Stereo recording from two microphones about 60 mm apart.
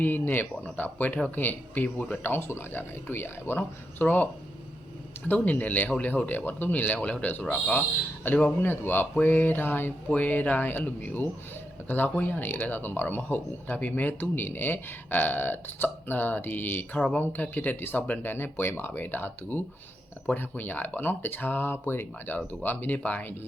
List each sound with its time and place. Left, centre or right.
0.0 s speech: left
4.0 s speech: left
5.3 s speech: left